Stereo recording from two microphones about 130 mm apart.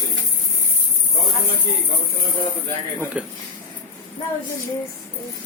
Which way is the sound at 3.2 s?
10° right (ahead or behind).